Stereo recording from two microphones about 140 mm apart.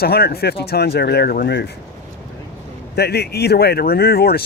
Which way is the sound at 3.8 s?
90° left.